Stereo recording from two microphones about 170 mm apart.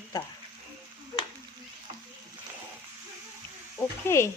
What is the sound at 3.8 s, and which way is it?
Insect, 15° left (ahead or behind).